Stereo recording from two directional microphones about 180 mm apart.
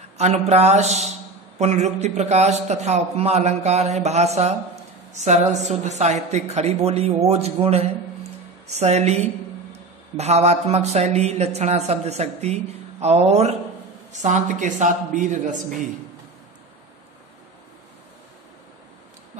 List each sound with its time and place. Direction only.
0.2 s a man's voice: 35° right (ahead or behind)